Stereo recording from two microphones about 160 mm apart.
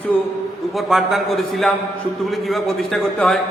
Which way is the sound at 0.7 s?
Centre (ahead or behind).